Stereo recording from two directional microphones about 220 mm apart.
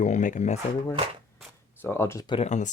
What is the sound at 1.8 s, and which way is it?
Speech, 10° left (ahead or behind).